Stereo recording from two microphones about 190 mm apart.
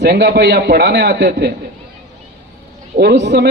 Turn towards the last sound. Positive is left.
turn(degrees=-65)  # may be behind; listen again after turning